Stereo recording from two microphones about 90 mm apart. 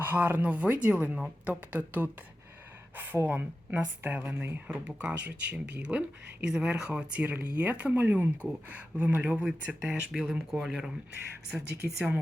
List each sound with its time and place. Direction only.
0.0 s a woman's voice: 20° right (ahead or behind); by 10.9 s 5° right (ahead or behind)